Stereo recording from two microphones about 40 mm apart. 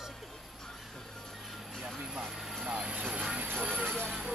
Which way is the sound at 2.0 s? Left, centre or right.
Centre.